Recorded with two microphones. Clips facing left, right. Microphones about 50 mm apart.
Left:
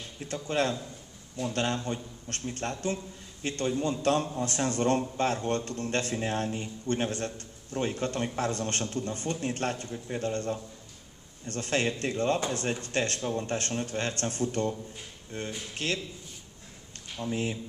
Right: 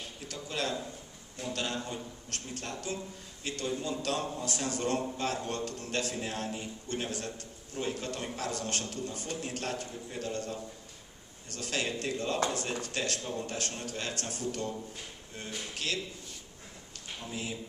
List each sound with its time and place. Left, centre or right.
0.2 s a man's voice: left
17.2 s a man's voice: left